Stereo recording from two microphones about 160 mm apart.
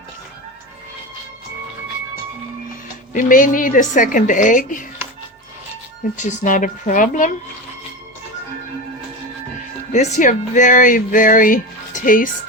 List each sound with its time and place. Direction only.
3.1 s speech: 55° left (ahead or behind)
6.1 s a woman's voice: 50° left (ahead or behind)
9.9 s speech: 45° left (ahead or behind)